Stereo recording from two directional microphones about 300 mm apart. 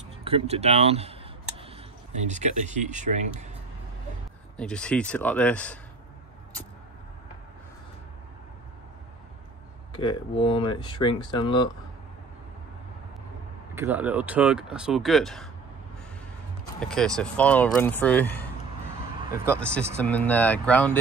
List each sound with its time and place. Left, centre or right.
0.2 s speech: centre
2.3 s speech: right
4.6 s speech: centre
9.9 s speech: centre
13.7 s speech: centre
16.8 s speech: centre
19.7 s speech: centre